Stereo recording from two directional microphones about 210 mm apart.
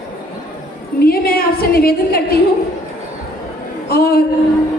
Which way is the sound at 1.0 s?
45° left (ahead or behind).